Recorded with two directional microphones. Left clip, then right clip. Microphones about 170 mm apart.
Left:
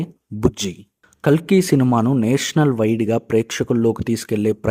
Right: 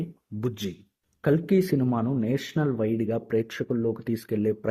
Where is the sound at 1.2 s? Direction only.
30° left (ahead or behind).